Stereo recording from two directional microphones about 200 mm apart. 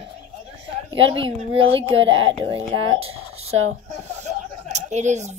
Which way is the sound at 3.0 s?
90° right.